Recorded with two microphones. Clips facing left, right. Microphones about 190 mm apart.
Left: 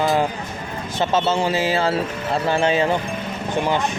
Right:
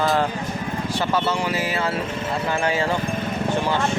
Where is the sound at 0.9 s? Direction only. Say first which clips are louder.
Left 4 dB; 20° left (ahead or behind).